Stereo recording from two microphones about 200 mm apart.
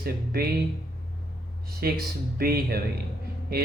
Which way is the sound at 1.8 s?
50° right (ahead or behind).